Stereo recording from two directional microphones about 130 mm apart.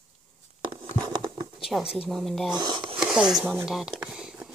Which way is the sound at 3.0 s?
5° right (ahead or behind).